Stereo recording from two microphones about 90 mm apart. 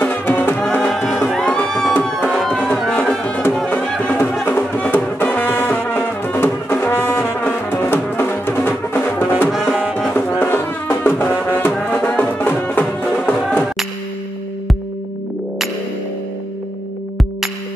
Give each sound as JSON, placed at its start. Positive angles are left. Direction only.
{"t": 0.0, "sound": "music", "side_deg": 20}
{"t": 0.7, "sound": "music", "side_deg": 5}
{"t": 4.2, "sound": "music", "side_deg": 25}